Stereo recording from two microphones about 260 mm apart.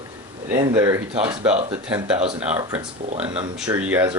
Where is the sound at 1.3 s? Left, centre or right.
Right.